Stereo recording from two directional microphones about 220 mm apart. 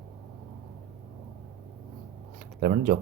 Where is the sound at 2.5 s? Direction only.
40° right (ahead or behind).